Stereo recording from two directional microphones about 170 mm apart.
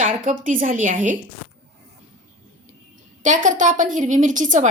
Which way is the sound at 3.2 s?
50° right (ahead or behind).